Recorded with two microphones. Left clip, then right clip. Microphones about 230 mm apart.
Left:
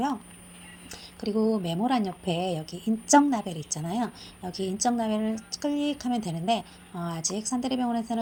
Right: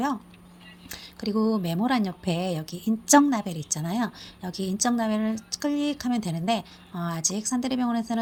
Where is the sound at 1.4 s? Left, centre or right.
Right.